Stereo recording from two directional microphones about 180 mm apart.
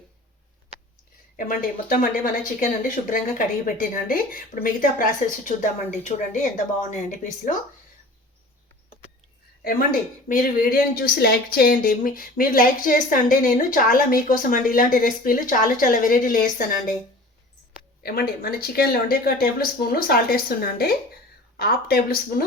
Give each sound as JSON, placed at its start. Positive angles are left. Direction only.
{"t": 1.4, "sound": "a woman's voice", "side_deg": 50}
{"t": 9.6, "sound": "a woman's voice", "side_deg": 50}
{"t": 18.0, "sound": "speech", "side_deg": 55}